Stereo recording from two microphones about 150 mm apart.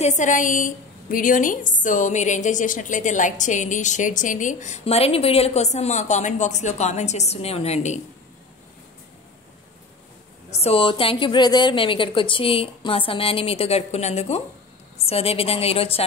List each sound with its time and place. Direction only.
0.0 s a woman's voice: 55° left (ahead or behind)
10.6 s a woman's voice: 40° left (ahead or behind)